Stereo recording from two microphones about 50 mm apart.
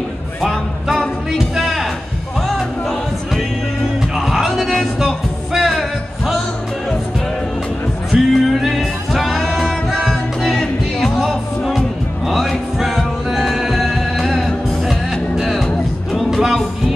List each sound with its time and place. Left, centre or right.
1.5 s a sound: centre
4.1 s music: centre
8.1 s music: centre
12.3 s music: centre